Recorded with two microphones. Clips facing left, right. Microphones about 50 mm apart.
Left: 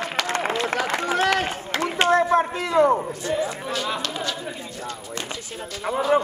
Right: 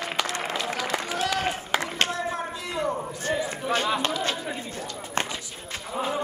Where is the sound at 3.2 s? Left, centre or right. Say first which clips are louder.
Left 2 dB; right.